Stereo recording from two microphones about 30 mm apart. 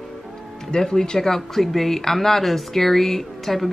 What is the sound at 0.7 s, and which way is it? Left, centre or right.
Speech, left.